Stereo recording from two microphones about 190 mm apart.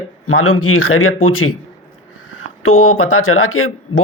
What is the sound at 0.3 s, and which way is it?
Speech, 90° left.